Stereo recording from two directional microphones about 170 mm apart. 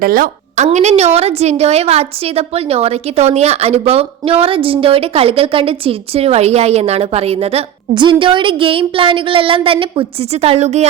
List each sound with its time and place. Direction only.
0.0 s a woman's voice: 60° right (ahead or behind)
0.5 s a woman's voice: 40° right (ahead or behind)